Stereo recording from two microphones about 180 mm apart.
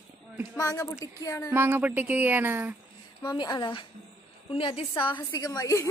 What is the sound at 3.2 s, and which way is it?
A woman's voice, 25° left (ahead or behind).